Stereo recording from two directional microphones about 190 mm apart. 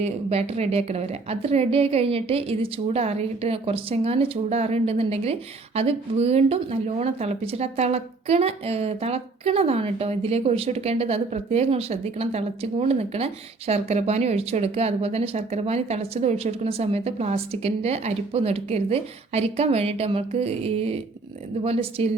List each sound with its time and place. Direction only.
0.0 s a woman's voice: 35° right (ahead or behind)